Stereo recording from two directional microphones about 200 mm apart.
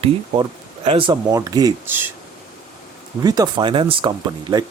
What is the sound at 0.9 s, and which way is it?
Speech, 25° right (ahead or behind).